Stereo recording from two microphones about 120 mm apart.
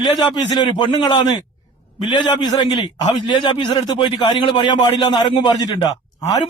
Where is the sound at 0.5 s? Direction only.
40° left (ahead or behind).